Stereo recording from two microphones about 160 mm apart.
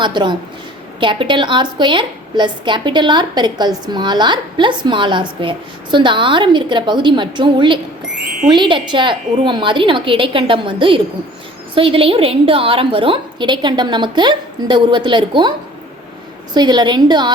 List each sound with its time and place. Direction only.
0.0 s a woman's voice: 30° right (ahead or behind)
16.6 s a woman's voice: 25° right (ahead or behind)